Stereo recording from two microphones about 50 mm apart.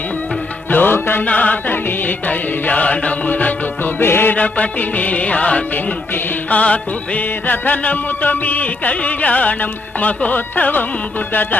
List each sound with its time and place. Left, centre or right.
0.7 s music: left
1.2 s music: left
4.0 s music: left
4.4 s music: left